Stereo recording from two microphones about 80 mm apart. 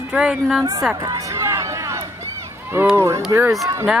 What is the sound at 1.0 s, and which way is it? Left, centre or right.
Run, right.